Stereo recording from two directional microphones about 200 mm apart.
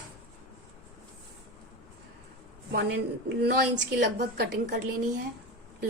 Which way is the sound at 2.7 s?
55° right (ahead or behind).